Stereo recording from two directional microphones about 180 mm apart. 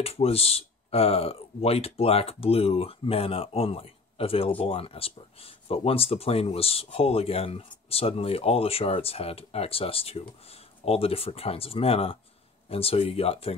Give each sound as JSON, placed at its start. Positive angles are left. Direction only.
{"t": 0.0, "sound": "speech", "side_deg": 35}